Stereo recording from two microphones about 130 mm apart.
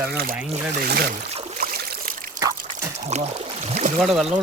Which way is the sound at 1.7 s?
90° right.